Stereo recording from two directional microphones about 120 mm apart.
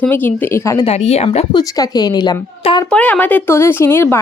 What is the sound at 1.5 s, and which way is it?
Speech, 30° left (ahead or behind).